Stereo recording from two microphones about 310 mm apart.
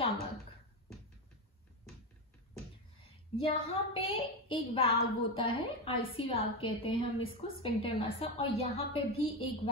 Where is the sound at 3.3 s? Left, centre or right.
Centre.